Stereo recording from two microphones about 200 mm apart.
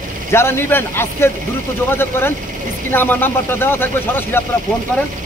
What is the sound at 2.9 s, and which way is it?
A man's voice, 10° left (ahead or behind).